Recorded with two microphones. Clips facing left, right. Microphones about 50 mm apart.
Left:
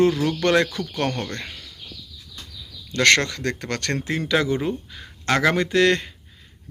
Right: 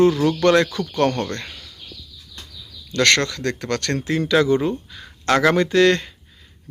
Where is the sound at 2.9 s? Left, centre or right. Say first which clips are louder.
Even; left.